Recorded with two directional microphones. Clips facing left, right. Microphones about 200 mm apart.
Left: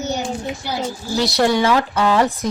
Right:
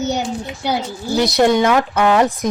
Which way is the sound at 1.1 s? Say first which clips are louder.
Right 3 dB; 20° right (ahead or behind).